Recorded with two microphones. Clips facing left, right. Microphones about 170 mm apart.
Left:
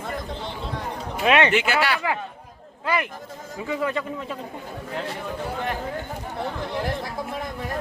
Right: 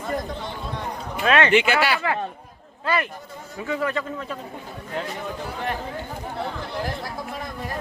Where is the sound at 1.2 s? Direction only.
20° left (ahead or behind).